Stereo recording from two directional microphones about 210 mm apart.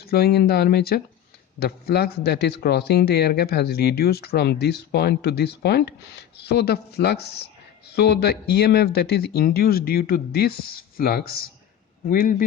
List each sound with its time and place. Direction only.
0.0 s a man's voice: 45° left (ahead or behind)